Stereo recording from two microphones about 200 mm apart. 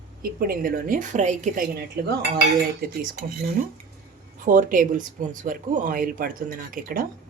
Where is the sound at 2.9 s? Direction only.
45° right (ahead or behind).